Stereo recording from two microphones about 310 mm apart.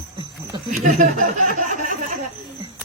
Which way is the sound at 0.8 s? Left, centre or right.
Right.